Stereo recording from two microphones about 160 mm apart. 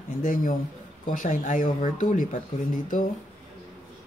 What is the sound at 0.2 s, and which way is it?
Speech, 60° left (ahead or behind).